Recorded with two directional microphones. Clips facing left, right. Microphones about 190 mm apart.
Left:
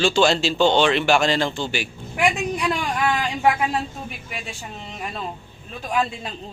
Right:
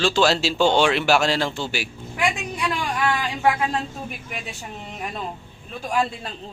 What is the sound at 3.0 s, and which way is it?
Speech, 15° left (ahead or behind).